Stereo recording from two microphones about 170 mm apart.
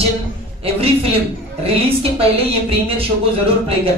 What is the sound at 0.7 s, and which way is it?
Speech, 35° right (ahead or behind).